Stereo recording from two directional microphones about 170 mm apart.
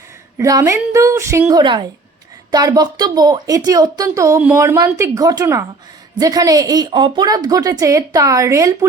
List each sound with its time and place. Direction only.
0.3 s a woman's voice: 20° right (ahead or behind)
1.6 s speech: 25° right (ahead or behind)